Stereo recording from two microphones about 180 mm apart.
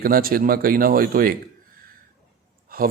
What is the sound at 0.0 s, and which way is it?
A man's voice, 55° right (ahead or behind).